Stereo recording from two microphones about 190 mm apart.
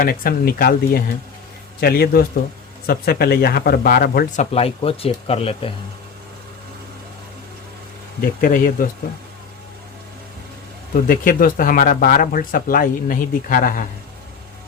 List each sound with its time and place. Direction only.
0.0 s speech: 50° left (ahead or behind)
4.5 s speech: 30° left (ahead or behind)
8.2 s speech: 45° left (ahead or behind)
10.9 s speech: 45° left (ahead or behind)